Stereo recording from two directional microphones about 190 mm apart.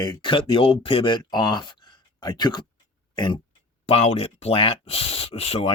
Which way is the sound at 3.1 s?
25° left (ahead or behind).